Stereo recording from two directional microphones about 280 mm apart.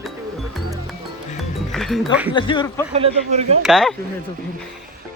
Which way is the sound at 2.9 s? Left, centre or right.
Right.